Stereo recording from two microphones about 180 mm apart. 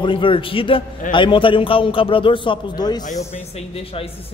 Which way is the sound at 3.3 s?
35° left (ahead or behind).